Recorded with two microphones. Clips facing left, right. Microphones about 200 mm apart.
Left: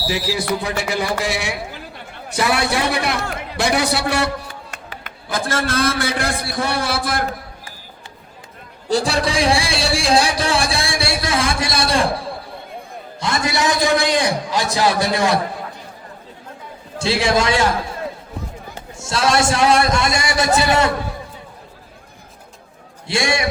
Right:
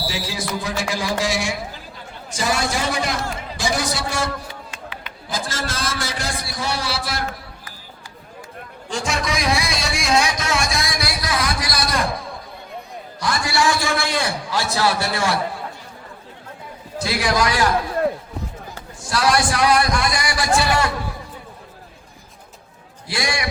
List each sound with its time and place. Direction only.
0.1 s a man's voice: 60° left (ahead or behind)
4.7 s a man's voice: 50° left (ahead or behind)
8.9 s a man's voice: 35° left (ahead or behind); by 15.4 s 20° left (ahead or behind)
17.0 s a man's voice: 25° left (ahead or behind)
23.0 s a man's voice: 25° left (ahead or behind)